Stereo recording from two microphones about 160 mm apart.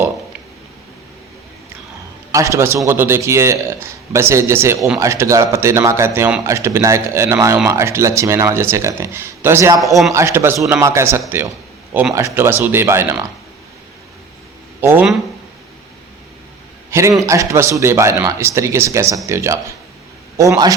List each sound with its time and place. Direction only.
2.3 s speech: 20° right (ahead or behind)
9.8 s a man's voice: centre (ahead or behind)
10.1 s speech: 15° right (ahead or behind)
14.8 s speech: 15° right (ahead or behind)
16.9 s a man's voice: 20° right (ahead or behind)